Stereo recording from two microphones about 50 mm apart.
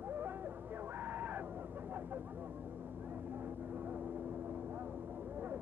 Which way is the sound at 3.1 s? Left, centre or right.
Right.